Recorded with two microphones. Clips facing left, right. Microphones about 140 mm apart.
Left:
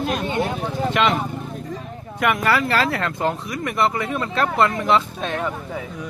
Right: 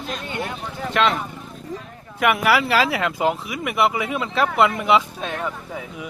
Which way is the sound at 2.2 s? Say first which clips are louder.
Right 1 dB; 5° right (ahead or behind).